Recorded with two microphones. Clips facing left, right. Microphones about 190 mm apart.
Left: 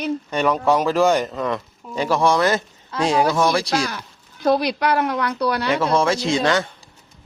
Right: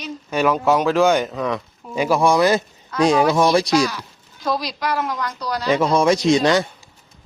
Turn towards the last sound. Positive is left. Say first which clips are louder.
# right 4 dB
turn(degrees=-15)  # may be behind; listen again after turning